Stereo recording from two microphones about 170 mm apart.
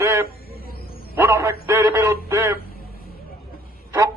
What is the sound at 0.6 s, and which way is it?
Bow-wow, 60° left (ahead or behind).